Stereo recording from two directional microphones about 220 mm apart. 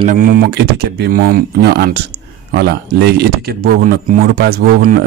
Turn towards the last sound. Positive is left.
turn(degrees=-45)  # may be behind; listen again after turning